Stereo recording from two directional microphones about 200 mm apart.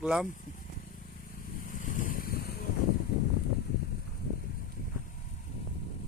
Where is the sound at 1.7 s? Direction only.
40° left (ahead or behind).